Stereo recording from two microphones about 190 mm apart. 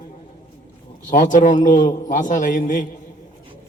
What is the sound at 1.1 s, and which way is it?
A man's voice, 40° left (ahead or behind).